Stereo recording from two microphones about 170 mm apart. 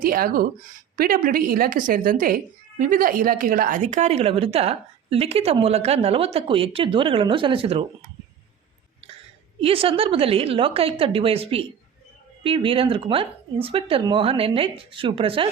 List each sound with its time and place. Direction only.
0.0 s speech: 60° right (ahead or behind); by 7.9 s 35° right (ahead or behind)
9.6 s speech: 35° right (ahead or behind)